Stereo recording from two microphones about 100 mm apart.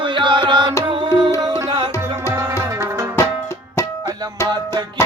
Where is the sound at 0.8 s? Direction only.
50° right (ahead or behind).